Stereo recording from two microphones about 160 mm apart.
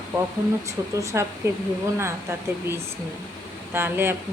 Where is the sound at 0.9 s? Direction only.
20° right (ahead or behind).